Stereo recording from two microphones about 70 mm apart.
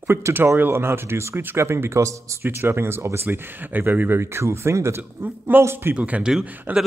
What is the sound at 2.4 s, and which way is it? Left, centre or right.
Speech, right.